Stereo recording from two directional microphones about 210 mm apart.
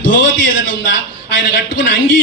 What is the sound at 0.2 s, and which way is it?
A man's voice, 60° left (ahead or behind).